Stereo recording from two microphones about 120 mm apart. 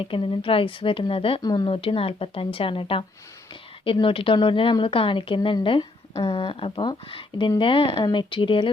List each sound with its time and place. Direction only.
0.0 s speech: 45° left (ahead or behind)
1.4 s speech: 35° left (ahead or behind)
4.0 s speech: 45° left (ahead or behind)